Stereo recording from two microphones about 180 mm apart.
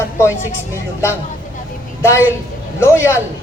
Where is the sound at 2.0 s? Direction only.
15° left (ahead or behind).